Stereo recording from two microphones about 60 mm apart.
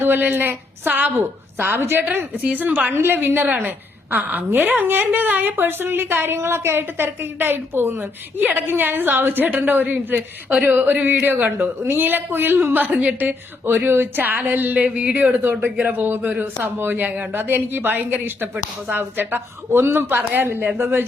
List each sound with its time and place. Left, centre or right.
0.0 s a woman's voice: right
2.9 s a woman's voice: right
8.4 s a woman's voice: right
15.4 s a woman's voice: right